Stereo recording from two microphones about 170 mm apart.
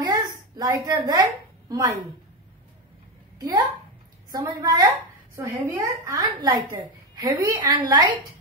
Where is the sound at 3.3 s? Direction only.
20° right (ahead or behind).